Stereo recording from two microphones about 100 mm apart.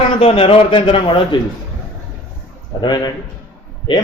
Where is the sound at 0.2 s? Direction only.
70° left (ahead or behind); by 1.4 s 55° left (ahead or behind).